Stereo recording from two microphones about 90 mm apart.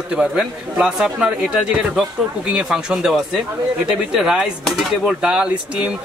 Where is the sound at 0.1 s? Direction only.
10° right (ahead or behind).